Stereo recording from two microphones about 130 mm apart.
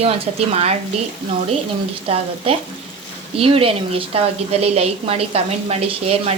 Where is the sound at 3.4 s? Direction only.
45° right (ahead or behind).